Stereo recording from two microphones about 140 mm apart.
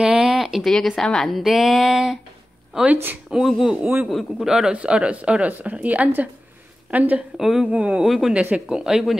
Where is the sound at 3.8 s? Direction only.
15° right (ahead or behind).